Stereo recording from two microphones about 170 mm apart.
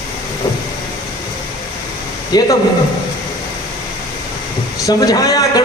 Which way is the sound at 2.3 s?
25° left (ahead or behind).